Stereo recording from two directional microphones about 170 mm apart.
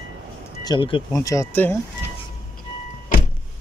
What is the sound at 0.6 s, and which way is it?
Speech, 30° left (ahead or behind).